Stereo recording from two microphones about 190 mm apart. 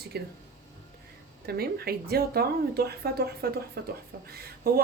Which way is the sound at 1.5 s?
55° right (ahead or behind).